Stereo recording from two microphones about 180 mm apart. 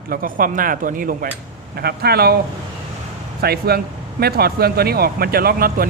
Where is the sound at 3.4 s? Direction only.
60° right (ahead or behind).